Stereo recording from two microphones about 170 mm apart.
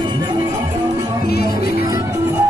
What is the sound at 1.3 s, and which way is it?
Music, 70° left (ahead or behind).